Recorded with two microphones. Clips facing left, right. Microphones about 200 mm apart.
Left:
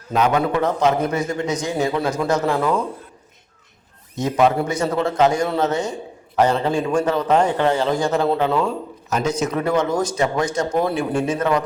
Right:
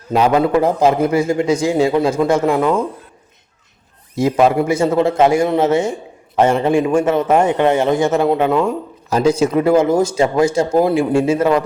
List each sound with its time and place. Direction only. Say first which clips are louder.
0.1 s a man's voice: right 5 dB; 30° right (ahead or behind)
4.1 s a man's voice: right 4 dB; 30° right (ahead or behind)
9.0 s a man's voice: right 7 dB; 30° right (ahead or behind)